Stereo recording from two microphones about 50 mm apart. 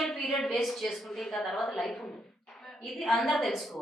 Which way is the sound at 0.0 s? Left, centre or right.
Centre.